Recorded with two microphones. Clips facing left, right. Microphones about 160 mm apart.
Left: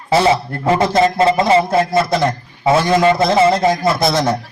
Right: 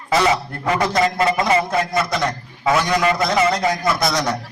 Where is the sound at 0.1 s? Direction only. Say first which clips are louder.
Left 4 dB; 30° left (ahead or behind).